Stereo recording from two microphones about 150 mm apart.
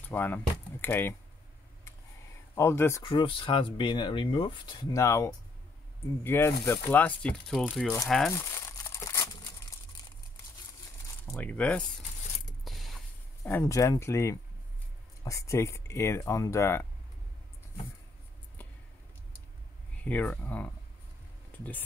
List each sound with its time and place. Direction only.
0.1 s speech: 10° left (ahead or behind)
2.5 s speech: 15° left (ahead or behind)
3.0 s speech: 35° left (ahead or behind); by 7.6 s 5° left (ahead or behind)
8.3 s crumpling: 15° left (ahead or behind)
11.2 s speech: 10° left (ahead or behind)
12.6 s a sound: centre (ahead or behind)
13.4 s speech: 20° left (ahead or behind)
20.0 s speech: 10° left (ahead or behind)